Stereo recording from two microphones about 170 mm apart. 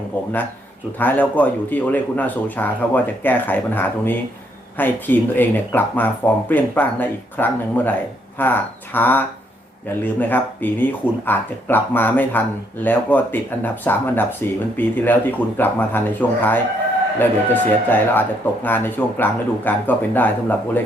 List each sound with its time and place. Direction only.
0.9 s speech: 10° left (ahead or behind)